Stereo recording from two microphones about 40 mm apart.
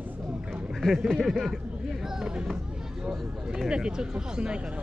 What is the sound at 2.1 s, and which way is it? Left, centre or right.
Run, centre.